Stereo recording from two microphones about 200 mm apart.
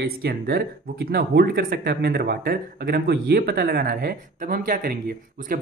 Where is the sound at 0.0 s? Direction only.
50° right (ahead or behind).